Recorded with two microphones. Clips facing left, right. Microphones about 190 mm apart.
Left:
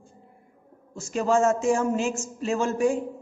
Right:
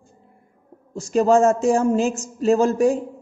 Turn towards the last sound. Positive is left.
turn(degrees=-40)  # may be behind; listen again after turning